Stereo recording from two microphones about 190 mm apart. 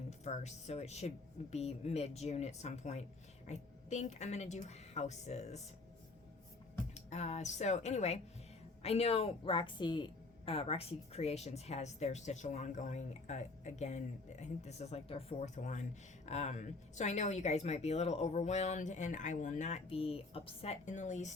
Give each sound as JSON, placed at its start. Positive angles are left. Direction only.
{"t": 0.1, "sound": "a woman's voice", "side_deg": 35}
{"t": 6.9, "sound": "a woman's voice", "side_deg": 35}